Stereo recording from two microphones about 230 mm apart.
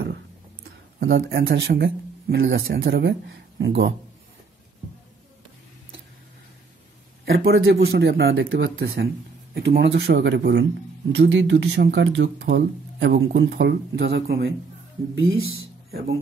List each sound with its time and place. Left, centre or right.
0.9 s speech: right
7.3 s speech: right